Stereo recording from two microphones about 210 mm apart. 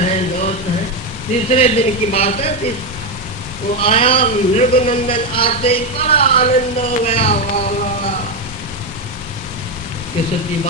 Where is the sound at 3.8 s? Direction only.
25° left (ahead or behind).